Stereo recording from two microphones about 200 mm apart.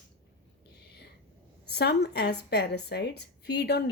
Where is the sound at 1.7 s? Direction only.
55° left (ahead or behind).